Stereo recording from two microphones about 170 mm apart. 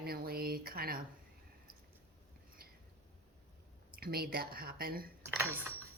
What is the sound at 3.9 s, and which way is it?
Speech, 65° right (ahead or behind).